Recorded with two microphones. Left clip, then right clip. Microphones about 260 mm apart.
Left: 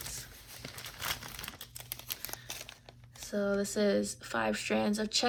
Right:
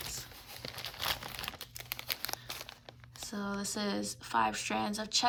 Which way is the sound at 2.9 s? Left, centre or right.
Centre.